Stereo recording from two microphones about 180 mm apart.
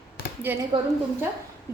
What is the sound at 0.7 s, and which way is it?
Speech, 25° right (ahead or behind).